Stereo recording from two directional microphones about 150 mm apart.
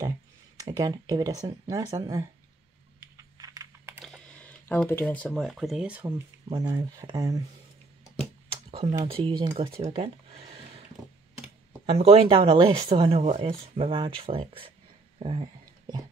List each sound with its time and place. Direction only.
0.6 s speech: 25° right (ahead or behind)
3.2 s computer keyboard: 25° right (ahead or behind)
4.0 s speech: 5° left (ahead or behind); by 6.2 s 10° right (ahead or behind)
6.5 s speech: 25° right (ahead or behind)
8.6 s a sound: 40° right (ahead or behind)
9.0 s speech: 35° right (ahead or behind)
9.6 s a sound: 35° right (ahead or behind)
11.8 s speech: 45° right (ahead or behind)
15.1 s whispering: 35° right (ahead or behind)